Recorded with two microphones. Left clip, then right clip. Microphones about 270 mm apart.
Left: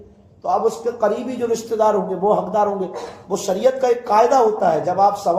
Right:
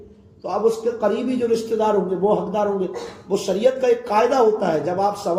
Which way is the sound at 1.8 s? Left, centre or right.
Centre.